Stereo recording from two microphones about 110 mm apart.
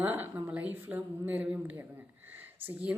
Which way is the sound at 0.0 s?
20° right (ahead or behind).